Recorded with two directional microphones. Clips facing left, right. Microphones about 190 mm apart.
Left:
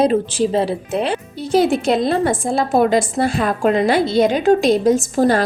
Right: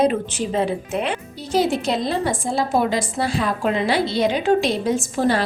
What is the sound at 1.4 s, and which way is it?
A woman's voice, 55° left (ahead or behind).